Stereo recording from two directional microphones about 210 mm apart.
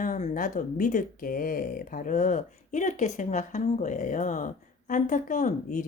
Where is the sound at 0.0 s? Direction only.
35° left (ahead or behind).